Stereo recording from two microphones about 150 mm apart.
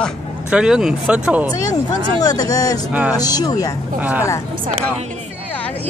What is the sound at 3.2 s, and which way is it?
Speech, 25° left (ahead or behind).